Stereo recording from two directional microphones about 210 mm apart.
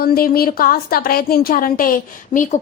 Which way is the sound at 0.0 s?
45° left (ahead or behind).